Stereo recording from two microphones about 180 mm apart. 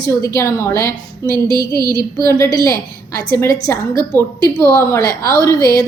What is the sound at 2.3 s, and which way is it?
Speech, 15° left (ahead or behind).